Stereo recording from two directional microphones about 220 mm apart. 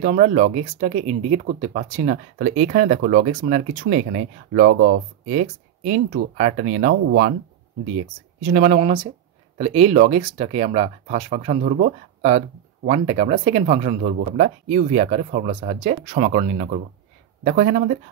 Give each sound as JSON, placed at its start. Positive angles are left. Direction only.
{"t": 0.0, "sound": "speech", "side_deg": -35}
{"t": 4.7, "sound": "speech", "side_deg": -65}
{"t": 5.3, "sound": "speech", "side_deg": -35}
{"t": 8.4, "sound": "speech", "side_deg": -35}